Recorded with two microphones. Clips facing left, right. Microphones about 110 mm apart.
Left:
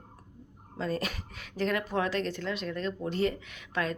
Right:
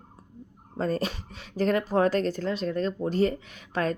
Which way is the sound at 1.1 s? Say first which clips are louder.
Right 3 dB; 30° right (ahead or behind).